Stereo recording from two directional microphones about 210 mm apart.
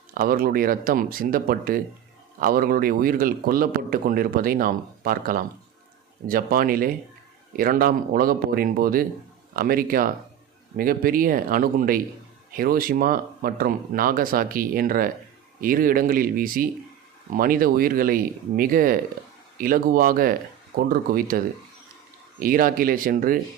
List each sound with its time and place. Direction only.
0.1 s a man's voice: 45° right (ahead or behind)